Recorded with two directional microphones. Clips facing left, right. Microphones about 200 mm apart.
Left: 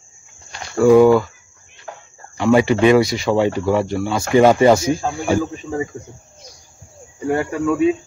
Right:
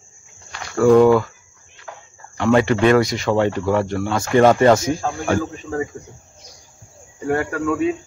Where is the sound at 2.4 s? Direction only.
10° left (ahead or behind).